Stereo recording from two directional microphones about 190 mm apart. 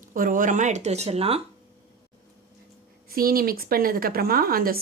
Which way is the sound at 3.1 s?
50° right (ahead or behind).